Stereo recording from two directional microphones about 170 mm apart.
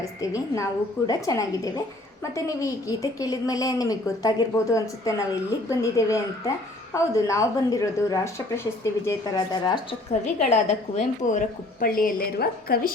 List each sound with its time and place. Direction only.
0.0 s speech: 20° left (ahead or behind)
10.5 s a woman's voice: 40° left (ahead or behind); by 12.9 s 65° left (ahead or behind)